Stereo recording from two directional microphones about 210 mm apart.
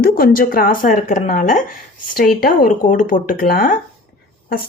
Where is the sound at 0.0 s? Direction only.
45° left (ahead or behind).